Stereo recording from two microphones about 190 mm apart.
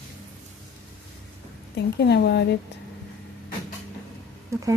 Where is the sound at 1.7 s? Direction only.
60° left (ahead or behind).